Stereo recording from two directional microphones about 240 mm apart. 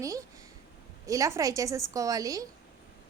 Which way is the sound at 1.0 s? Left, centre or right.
Centre.